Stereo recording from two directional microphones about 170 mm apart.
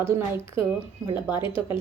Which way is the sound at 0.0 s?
15° right (ahead or behind).